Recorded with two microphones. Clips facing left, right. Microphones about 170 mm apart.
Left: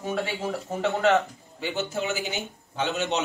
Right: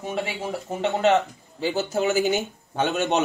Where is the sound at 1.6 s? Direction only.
40° right (ahead or behind).